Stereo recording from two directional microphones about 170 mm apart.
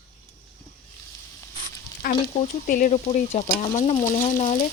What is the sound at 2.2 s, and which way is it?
Speech, 55° left (ahead or behind).